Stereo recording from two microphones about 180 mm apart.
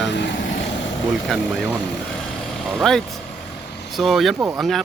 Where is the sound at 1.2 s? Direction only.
Centre (ahead or behind).